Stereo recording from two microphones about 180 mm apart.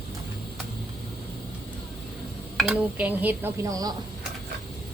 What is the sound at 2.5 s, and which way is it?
Speech, centre (ahead or behind).